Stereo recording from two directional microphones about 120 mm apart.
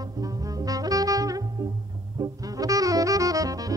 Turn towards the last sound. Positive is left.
turn(degrees=-30)  # may be behind; listen again after turning